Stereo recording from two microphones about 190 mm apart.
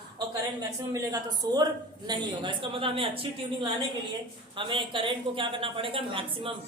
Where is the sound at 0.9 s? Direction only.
20° right (ahead or behind).